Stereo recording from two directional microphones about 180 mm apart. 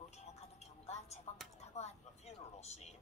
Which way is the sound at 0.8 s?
35° left (ahead or behind).